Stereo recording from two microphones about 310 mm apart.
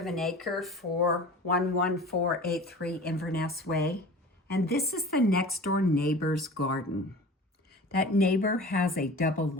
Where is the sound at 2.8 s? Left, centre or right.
Left.